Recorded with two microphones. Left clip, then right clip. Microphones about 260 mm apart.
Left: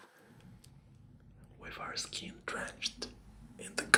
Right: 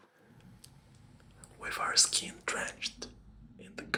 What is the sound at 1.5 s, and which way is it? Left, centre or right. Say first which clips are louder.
Speech: right 12 dB; right.